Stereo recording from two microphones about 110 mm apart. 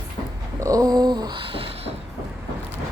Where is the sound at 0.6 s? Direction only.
30° right (ahead or behind); by 1.9 s 55° right (ahead or behind).